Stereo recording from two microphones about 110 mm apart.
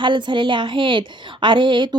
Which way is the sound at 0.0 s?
45° right (ahead or behind).